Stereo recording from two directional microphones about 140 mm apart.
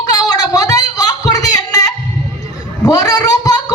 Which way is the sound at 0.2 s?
25° left (ahead or behind).